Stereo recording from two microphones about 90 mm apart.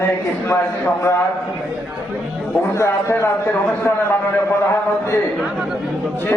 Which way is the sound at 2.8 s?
30° left (ahead or behind).